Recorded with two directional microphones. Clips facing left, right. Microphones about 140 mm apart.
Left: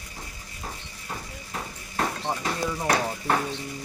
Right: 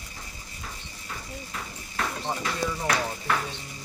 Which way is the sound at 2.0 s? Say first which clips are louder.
Left 2 dB; 35° left (ahead or behind).